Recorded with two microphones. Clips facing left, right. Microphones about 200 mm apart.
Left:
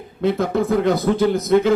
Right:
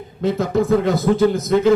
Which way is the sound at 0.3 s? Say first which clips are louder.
Even; 55° left (ahead or behind).